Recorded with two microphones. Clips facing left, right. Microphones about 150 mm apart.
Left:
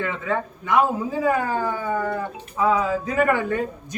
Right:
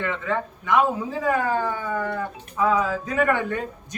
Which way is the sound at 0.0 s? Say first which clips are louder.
Left 1 dB; 10° left (ahead or behind).